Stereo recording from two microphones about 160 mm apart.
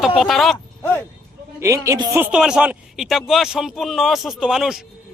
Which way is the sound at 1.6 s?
20° right (ahead or behind).